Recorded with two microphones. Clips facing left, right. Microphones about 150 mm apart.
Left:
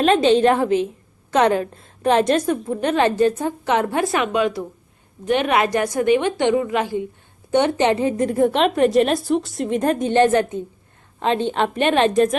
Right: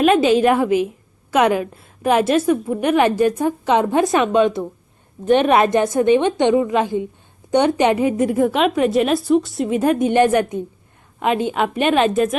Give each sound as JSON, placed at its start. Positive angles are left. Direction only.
{"t": 0.0, "sound": "a woman's voice", "side_deg": -10}